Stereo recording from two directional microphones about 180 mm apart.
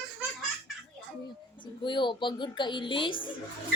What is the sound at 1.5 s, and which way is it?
A woman's voice, 25° left (ahead or behind).